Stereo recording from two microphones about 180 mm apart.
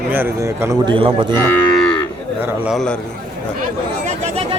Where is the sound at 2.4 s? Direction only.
Centre (ahead or behind).